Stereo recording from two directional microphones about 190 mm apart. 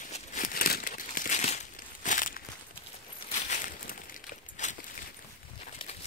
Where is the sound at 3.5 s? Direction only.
45° left (ahead or behind).